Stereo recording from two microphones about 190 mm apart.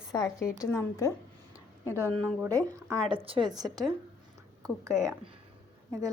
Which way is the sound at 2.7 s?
15° right (ahead or behind).